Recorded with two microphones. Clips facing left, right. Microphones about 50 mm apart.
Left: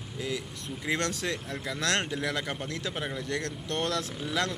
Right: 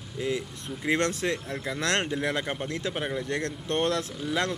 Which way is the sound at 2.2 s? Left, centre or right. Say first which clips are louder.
Right 3 dB; right.